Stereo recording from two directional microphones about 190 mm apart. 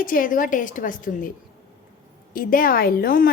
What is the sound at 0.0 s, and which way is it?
A woman's voice, 45° left (ahead or behind).